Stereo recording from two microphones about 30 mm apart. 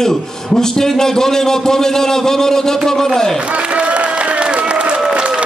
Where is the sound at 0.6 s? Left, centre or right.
Centre.